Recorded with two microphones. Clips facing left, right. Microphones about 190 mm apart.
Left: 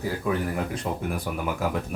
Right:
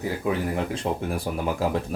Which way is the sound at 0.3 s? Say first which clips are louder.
Right 2 dB; 25° right (ahead or behind).